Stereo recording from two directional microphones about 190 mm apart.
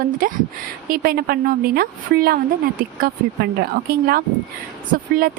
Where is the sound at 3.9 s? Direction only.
55° right (ahead or behind).